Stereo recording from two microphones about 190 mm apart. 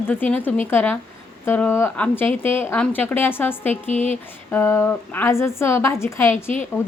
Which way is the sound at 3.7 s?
40° left (ahead or behind).